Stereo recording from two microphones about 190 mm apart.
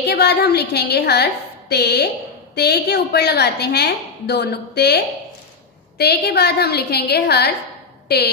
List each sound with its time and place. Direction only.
0.0 s a woman's voice: 60° left (ahead or behind)